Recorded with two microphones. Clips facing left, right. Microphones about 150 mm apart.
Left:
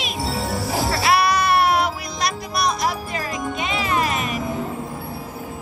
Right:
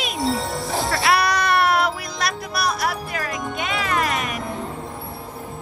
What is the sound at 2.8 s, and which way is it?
Music, 65° right (ahead or behind).